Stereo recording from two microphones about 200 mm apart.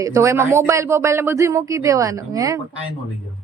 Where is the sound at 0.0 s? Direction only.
15° right (ahead or behind).